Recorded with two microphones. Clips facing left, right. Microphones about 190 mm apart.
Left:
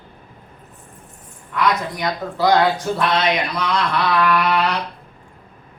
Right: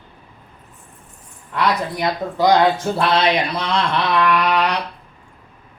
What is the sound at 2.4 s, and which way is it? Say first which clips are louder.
Speech: right 1 dB; 20° right (ahead or behind).